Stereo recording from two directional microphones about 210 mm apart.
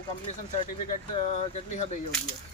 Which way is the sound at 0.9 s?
35° left (ahead or behind).